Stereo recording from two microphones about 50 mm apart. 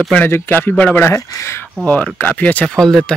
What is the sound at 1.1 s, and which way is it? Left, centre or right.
Speech, left.